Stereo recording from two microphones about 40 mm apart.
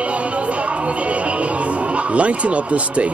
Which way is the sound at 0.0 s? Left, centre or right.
Right.